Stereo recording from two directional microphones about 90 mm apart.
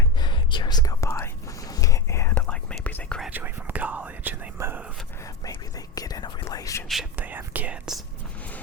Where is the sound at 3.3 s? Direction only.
25° right (ahead or behind).